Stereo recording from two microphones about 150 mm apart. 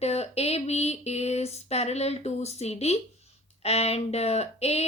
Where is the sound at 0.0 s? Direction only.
45° left (ahead or behind).